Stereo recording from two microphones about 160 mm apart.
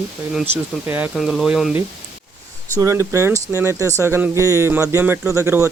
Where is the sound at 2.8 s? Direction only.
20° right (ahead or behind).